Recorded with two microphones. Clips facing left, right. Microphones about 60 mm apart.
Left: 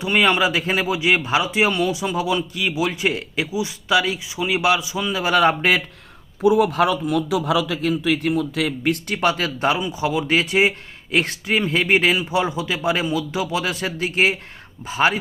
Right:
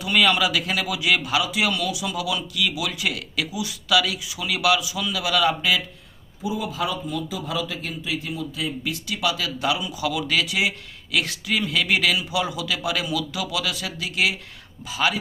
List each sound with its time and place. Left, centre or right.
0.0 s speech: left
6.4 s a man's voice: left
8.8 s speech: left